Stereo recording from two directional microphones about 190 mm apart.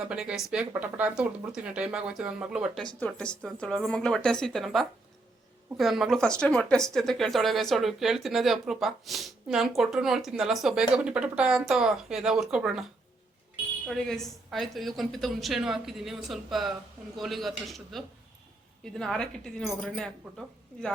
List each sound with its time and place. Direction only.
0.0 s speech: 5° right (ahead or behind)
13.8 s speech: centre (ahead or behind)